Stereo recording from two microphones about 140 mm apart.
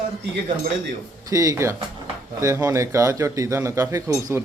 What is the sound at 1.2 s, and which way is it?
A man's voice, 25° right (ahead or behind).